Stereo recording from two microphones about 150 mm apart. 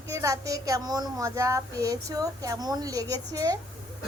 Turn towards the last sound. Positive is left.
turn(degrees=-25)  # may be behind; listen again after turning